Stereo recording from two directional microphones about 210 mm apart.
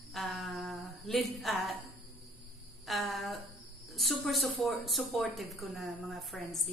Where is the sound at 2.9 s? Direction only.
Centre (ahead or behind).